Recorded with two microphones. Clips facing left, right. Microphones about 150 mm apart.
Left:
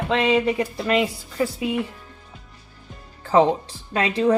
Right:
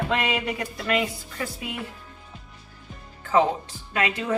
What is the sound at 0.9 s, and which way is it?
Speech, 30° left (ahead or behind).